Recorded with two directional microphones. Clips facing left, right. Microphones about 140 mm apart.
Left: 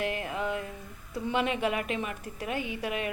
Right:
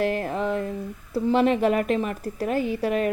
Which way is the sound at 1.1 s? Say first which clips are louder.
Right 9 dB; 40° right (ahead or behind).